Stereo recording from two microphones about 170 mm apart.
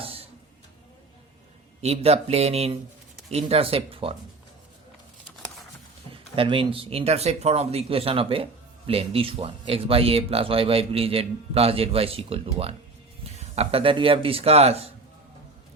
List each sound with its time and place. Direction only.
0.0 s a sound: 35° right (ahead or behind)
1.8 s speech: 35° right (ahead or behind)
6.3 s speech: 30° right (ahead or behind)